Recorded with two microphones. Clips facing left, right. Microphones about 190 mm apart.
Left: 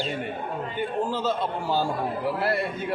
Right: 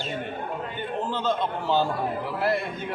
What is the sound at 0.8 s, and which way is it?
A man's voice, 10° left (ahead or behind).